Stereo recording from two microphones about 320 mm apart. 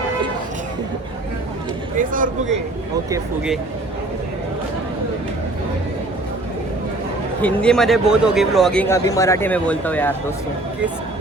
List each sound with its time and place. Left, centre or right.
2.0 s speech: right
3.1 s speech: centre
7.4 s speech: centre